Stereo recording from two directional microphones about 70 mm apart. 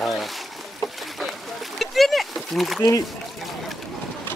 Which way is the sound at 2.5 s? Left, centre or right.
Centre.